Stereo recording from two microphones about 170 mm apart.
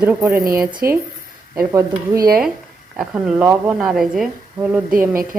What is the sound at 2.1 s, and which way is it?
Speech, 60° right (ahead or behind).